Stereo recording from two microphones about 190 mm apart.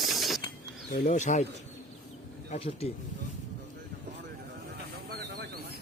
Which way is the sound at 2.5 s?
30° left (ahead or behind).